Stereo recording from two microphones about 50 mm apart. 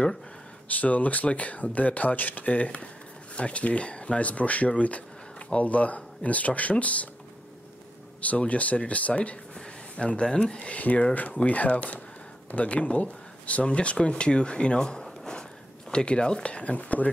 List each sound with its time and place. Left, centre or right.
0.7 s speech: left
8.2 s speech: left